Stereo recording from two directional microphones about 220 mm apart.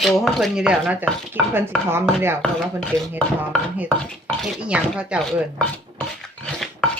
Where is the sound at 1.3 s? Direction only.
10° right (ahead or behind).